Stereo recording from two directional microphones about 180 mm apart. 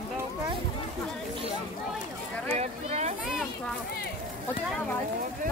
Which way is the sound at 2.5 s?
35° right (ahead or behind).